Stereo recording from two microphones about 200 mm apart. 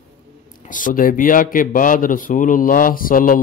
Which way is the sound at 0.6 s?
40° left (ahead or behind).